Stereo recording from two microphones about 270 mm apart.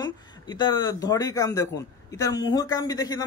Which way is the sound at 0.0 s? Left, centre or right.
Centre.